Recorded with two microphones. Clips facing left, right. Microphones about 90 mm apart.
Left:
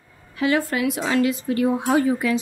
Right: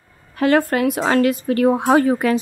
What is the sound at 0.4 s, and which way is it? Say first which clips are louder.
A woman's voice: right 5 dB; 50° right (ahead or behind).